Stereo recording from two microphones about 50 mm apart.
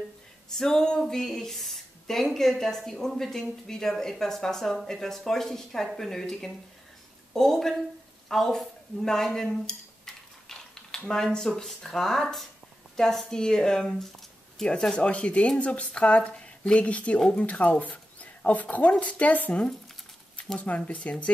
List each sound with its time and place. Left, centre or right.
0.6 s speech: centre
8.3 s dishes: centre
11.3 s speech: centre
14.8 s speech: centre